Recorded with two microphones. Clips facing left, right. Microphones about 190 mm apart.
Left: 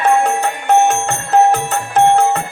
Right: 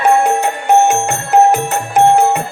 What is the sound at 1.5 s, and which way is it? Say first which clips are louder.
Music: right 2 dB; 15° right (ahead or behind).